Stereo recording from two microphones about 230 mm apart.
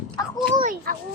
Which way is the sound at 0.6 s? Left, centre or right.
Right.